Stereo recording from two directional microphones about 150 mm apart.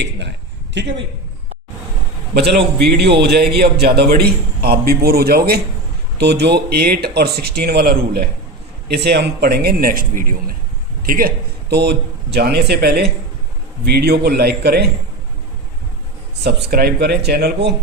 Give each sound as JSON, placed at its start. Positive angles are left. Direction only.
{"t": 2.3, "sound": "a man's voice", "side_deg": -90}
{"t": 16.4, "sound": "a man's voice", "side_deg": -90}